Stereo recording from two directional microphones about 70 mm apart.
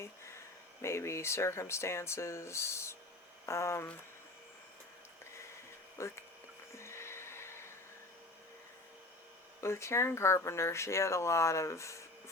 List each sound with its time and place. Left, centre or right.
0.8 s speech: left
6.0 s speech: left
6.7 s a sound: left
9.6 s speech: left